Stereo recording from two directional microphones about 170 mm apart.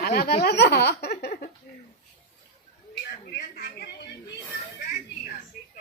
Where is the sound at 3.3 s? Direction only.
70° left (ahead or behind).